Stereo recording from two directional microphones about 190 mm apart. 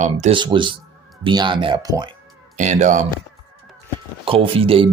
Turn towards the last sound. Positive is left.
turn(degrees=-30)  # may be behind; listen again after turning